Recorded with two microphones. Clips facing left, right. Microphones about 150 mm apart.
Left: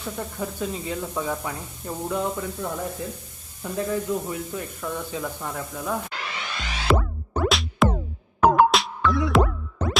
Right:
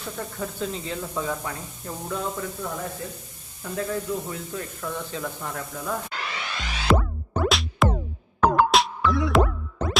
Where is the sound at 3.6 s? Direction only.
15° left (ahead or behind).